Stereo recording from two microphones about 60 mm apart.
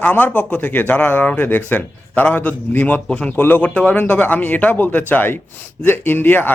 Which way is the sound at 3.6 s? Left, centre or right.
Centre.